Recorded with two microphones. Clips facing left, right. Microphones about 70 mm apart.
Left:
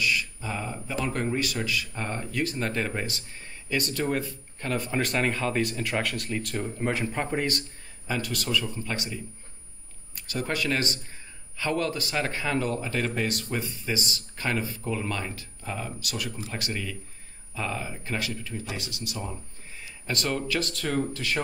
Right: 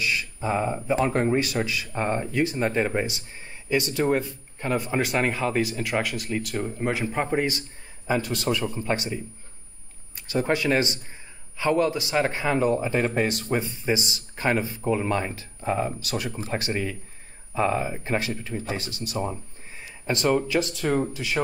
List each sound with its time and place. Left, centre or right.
0.0 s a man's voice: right; by 7.6 s centre
8.1 s a man's voice: right
20.1 s speech: right